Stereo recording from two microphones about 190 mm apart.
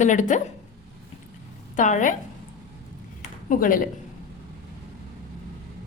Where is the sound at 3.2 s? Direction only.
45° left (ahead or behind).